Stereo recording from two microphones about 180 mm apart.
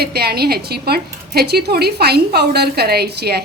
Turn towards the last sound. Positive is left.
turn(degrees=-65)  # may be behind; listen again after turning